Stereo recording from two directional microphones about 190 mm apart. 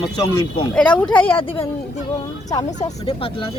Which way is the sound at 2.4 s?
20° left (ahead or behind).